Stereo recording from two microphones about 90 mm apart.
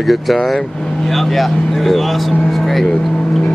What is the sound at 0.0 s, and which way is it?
Speech, centre (ahead or behind).